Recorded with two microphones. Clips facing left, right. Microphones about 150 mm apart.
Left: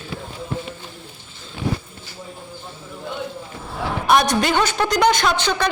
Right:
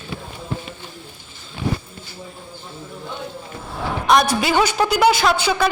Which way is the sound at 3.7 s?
Centre (ahead or behind).